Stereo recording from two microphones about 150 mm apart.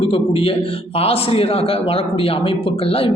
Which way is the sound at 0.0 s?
40° left (ahead or behind).